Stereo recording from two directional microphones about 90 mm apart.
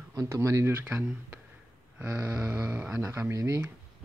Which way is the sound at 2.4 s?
15° right (ahead or behind).